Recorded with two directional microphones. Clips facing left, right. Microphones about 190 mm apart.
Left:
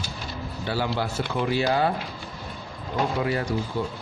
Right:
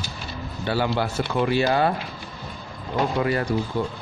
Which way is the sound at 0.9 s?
65° right (ahead or behind).